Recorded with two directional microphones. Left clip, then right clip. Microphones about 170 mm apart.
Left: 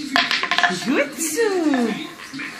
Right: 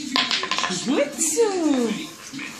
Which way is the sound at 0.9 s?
30° left (ahead or behind).